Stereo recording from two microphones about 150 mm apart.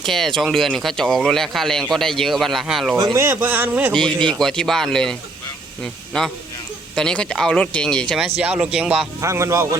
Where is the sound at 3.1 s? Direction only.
15° right (ahead or behind).